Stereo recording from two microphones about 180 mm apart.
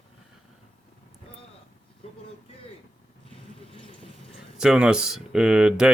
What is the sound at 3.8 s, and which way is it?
Vehicle, 30° left (ahead or behind).